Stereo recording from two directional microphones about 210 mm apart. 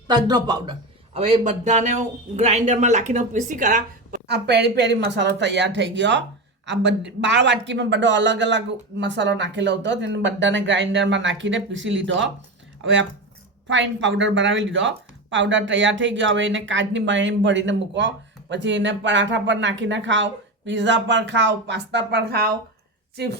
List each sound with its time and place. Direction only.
0.1 s a man's voice: 20° right (ahead or behind)
1.5 s a woman's voice: 35° right (ahead or behind); by 23.4 s 50° right (ahead or behind)